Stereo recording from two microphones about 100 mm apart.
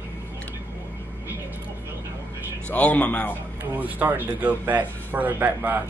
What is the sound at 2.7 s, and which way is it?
Speech, 15° left (ahead or behind).